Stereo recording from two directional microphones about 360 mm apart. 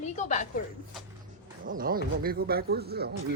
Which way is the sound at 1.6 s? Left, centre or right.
Right.